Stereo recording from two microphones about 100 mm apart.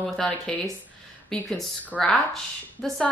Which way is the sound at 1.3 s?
15° left (ahead or behind).